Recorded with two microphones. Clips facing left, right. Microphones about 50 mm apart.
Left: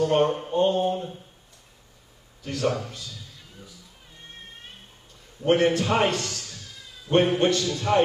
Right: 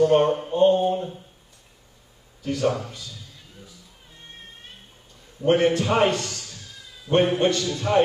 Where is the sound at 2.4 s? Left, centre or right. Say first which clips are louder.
Right 2 dB; centre.